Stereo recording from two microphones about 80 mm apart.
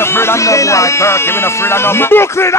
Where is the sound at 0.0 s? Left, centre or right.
Left.